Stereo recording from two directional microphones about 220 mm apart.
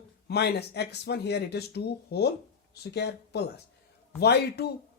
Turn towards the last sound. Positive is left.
turn(degrees=45)  # may be behind; listen again after turning